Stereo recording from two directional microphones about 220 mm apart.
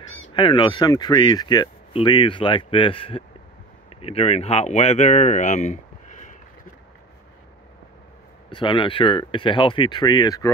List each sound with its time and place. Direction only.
0.3 s speech: 20° left (ahead or behind)
8.5 s speech: 20° left (ahead or behind)